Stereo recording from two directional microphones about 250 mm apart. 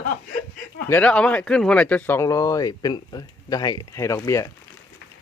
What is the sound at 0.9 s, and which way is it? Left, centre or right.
Speech, centre.